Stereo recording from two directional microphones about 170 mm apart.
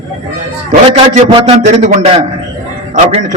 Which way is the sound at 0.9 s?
35° right (ahead or behind).